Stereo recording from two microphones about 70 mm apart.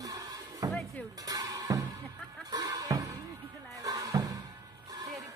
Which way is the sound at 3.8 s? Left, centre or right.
Right.